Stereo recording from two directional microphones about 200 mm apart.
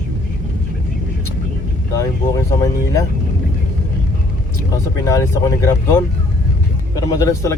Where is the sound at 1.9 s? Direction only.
15° left (ahead or behind).